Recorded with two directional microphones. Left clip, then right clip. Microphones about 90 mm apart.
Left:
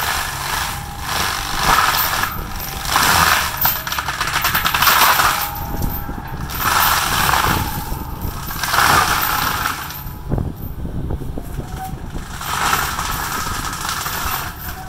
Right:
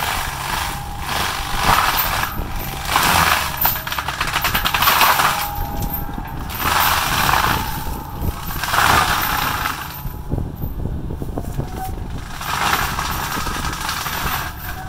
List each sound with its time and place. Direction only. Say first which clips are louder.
0.0 s a sound: left 1 dB; 25° right (ahead or behind)
5.0 s crushing: left 1 dB; 20° right (ahead or behind)
6.6 s vehicle: left 1 dB; 20° right (ahead or behind)
8.5 s vehicle: left 1 dB; 30° right (ahead or behind)
12.4 s vehicle: left 1 dB; 25° right (ahead or behind)
13.8 s train: left 1 dB; 25° right (ahead or behind)